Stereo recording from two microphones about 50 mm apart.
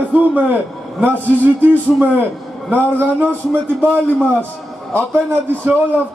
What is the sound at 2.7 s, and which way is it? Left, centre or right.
Speech, right.